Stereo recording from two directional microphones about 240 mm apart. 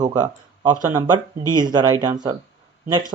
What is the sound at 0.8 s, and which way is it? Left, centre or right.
A man's voice, centre.